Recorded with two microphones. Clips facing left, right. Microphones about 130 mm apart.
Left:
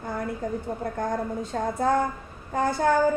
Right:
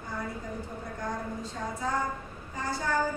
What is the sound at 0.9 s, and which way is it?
A woman's voice, 55° left (ahead or behind).